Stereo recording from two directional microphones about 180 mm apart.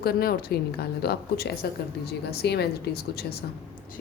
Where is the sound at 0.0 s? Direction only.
60° left (ahead or behind).